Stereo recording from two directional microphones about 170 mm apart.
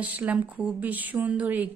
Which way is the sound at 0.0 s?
10° right (ahead or behind).